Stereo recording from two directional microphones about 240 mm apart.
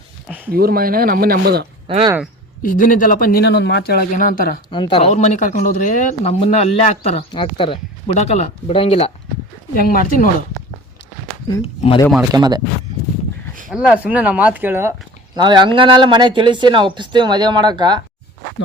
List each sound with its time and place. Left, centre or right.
0.3 s a sound: centre
0.5 s speech: right
1.9 s speech: right
2.6 s speech: left
4.7 s speech: left
9.7 s speech: left
11.4 s speech: left
12.3 s speech: centre
13.7 s speech: centre